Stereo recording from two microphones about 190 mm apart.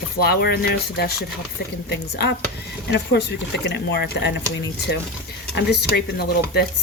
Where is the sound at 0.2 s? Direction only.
55° left (ahead or behind).